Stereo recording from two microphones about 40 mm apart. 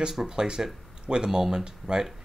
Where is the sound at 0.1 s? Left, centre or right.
Centre.